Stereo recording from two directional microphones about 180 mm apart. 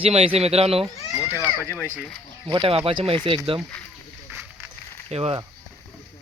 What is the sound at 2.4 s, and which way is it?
Speech, 30° right (ahead or behind).